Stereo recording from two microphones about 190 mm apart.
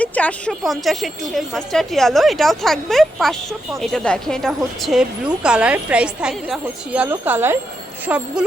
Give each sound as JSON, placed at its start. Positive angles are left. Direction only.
{"t": 0.0, "sound": "a woman's voice", "side_deg": 5}